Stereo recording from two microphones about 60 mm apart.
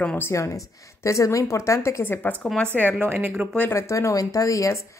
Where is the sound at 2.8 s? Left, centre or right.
Right.